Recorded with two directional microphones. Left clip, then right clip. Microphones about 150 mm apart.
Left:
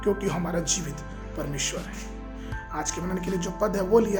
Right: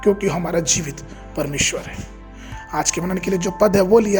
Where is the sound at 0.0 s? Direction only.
40° right (ahead or behind).